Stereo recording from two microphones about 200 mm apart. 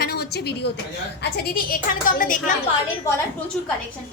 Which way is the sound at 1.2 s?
50° left (ahead or behind).